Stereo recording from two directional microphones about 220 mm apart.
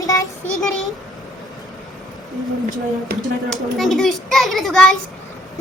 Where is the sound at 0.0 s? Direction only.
15° left (ahead or behind).